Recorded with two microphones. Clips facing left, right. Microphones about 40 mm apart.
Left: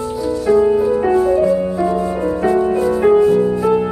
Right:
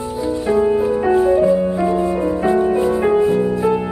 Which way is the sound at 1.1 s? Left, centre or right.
Right.